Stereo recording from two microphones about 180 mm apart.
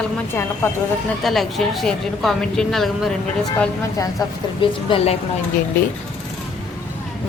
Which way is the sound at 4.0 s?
25° left (ahead or behind).